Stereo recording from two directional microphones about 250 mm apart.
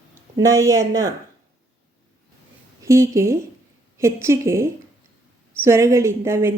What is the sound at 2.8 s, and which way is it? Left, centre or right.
A woman's voice, centre.